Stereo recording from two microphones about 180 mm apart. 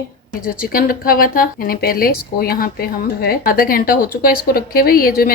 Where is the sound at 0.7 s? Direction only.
50° left (ahead or behind).